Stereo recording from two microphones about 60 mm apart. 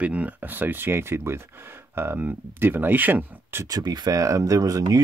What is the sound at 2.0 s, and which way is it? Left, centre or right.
Speech, right.